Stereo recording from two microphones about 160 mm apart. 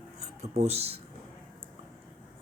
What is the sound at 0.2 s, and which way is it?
Speech, 45° right (ahead or behind).